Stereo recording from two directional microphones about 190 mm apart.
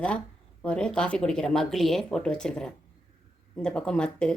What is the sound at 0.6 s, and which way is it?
A woman's voice, 5° left (ahead or behind).